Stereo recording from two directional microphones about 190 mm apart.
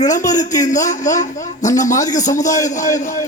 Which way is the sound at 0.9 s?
40° left (ahead or behind).